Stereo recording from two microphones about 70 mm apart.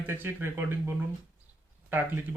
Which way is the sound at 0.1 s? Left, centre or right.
Right.